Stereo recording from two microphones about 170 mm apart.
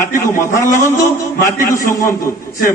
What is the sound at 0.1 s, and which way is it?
A man's voice, 15° left (ahead or behind).